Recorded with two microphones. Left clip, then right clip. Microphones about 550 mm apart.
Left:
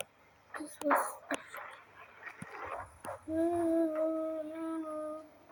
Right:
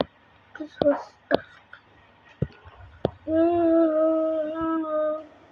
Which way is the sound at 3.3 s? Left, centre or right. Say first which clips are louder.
Right 11 dB; left.